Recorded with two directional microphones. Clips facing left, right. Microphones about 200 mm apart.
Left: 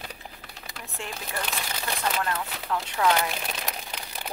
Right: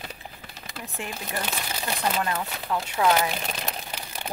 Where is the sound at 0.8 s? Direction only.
15° right (ahead or behind).